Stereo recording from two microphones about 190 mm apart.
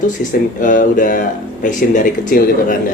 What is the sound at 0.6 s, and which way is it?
Speech, 45° left (ahead or behind).